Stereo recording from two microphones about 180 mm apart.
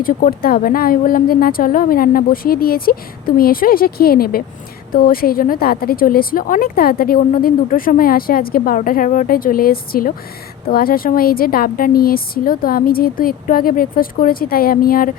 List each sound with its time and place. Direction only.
0.0 s a woman's voice: 50° left (ahead or behind)